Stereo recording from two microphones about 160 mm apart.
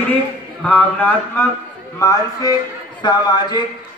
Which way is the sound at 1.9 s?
20° left (ahead or behind).